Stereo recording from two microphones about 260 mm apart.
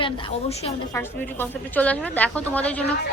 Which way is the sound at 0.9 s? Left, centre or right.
Centre.